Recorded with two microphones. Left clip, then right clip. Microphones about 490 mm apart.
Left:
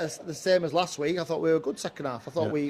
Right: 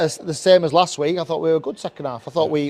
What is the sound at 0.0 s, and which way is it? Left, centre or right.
Speech, right.